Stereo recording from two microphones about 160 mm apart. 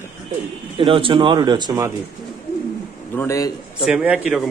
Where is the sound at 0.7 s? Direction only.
35° right (ahead or behind).